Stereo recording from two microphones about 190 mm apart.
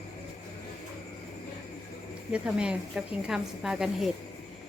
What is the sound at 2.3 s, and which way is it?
A woman's voice, 5° right (ahead or behind).